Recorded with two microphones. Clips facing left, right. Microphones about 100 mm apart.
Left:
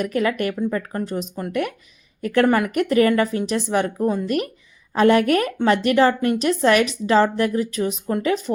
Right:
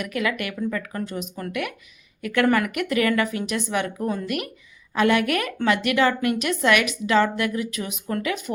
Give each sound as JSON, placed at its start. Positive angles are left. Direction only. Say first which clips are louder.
{"t": 0.0, "sound": "a woman's voice", "louder": "left 5 dB", "side_deg": 35}